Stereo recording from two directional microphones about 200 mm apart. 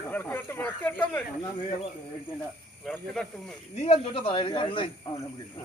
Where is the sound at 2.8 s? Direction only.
Centre (ahead or behind).